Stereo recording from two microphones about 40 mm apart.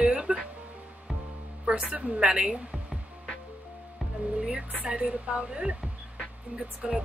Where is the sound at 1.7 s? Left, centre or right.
Right.